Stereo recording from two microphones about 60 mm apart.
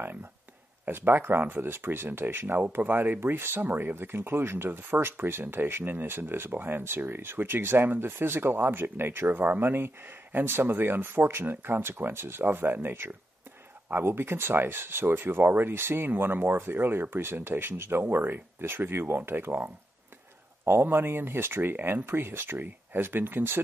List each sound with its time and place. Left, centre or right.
0.8 s speech: right